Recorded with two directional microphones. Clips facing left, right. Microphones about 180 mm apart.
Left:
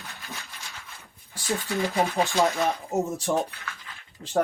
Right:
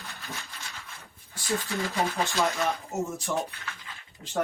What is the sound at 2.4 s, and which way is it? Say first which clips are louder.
Speech: left 2 dB; 35° left (ahead or behind).